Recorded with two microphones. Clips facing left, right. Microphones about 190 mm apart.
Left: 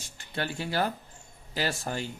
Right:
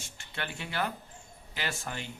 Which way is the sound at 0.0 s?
35° left (ahead or behind).